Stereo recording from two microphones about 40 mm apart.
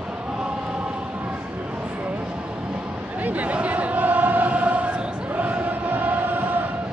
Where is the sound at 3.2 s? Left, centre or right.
Right.